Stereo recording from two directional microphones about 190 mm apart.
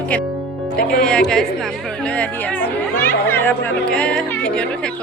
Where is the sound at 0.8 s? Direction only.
50° left (ahead or behind).